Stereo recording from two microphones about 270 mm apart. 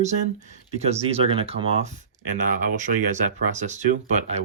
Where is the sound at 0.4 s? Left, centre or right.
Right.